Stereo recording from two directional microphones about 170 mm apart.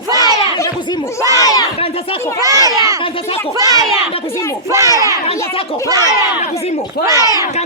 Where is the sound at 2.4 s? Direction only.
20° right (ahead or behind).